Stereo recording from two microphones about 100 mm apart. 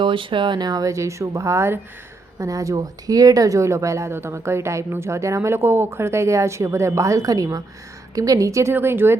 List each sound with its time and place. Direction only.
0.0 s speech: 55° right (ahead or behind); by 9.1 s 25° right (ahead or behind)